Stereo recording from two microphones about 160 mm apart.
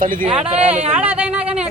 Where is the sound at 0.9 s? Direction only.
10° right (ahead or behind).